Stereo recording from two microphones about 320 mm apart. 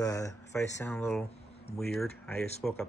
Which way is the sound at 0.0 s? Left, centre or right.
Centre.